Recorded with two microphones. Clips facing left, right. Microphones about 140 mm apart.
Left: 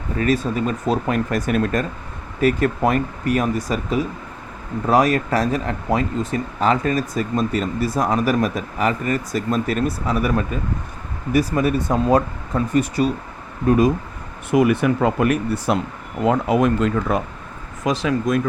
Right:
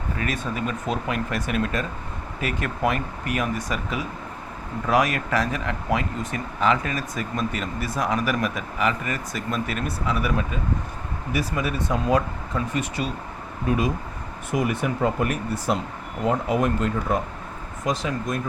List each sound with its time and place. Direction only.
0.2 s speech: 35° left (ahead or behind)
14.5 s speech: 70° left (ahead or behind)
16.2 s speech: 85° left